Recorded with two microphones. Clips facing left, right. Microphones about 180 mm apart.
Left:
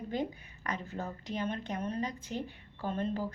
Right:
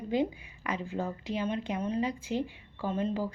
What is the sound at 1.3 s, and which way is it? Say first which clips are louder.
Speech: right 3 dB; 45° left (ahead or behind).